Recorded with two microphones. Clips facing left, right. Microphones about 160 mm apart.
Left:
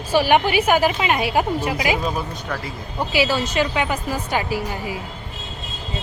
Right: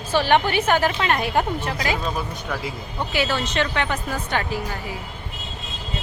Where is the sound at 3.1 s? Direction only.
10° left (ahead or behind).